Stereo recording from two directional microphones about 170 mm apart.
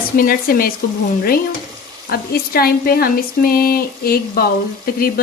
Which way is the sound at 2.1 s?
65° left (ahead or behind).